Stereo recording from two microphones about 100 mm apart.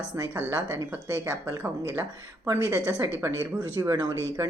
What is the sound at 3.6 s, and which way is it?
Speech, 40° right (ahead or behind).